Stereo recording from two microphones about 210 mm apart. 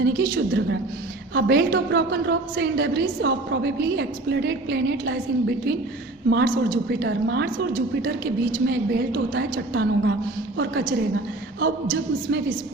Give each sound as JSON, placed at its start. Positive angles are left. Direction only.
{"t": 0.0, "sound": "a woman's voice", "side_deg": -55}